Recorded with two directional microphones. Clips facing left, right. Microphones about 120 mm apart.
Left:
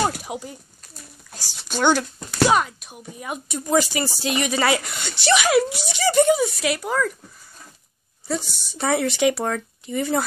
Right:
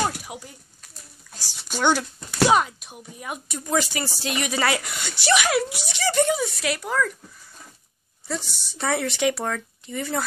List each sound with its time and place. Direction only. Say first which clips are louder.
0.3 s a sound: left 7 dB; 25° left (ahead or behind)
1.3 s speech: left 3 dB; centre (ahead or behind); by 2.9 s 15° right (ahead or behind)
3.2 s a woman's voice: left 4 dB; centre (ahead or behind)
6.0 s speech: left 5 dB; 10° left (ahead or behind)
8.6 s speech: left 3 dB; 10° left (ahead or behind)